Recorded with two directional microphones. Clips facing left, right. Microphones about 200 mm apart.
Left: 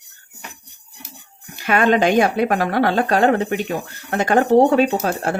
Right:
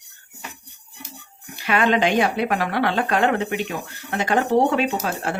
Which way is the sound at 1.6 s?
45° left (ahead or behind).